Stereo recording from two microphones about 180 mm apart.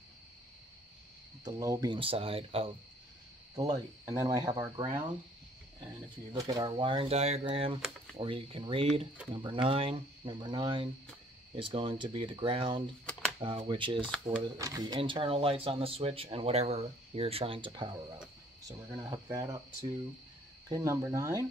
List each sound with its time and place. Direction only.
1.4 s speech: 20° right (ahead or behind)
3.7 s speech: 20° right (ahead or behind)
6.3 s speech: 25° right (ahead or behind)